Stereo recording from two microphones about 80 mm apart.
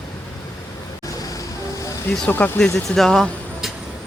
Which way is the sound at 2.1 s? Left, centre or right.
Left.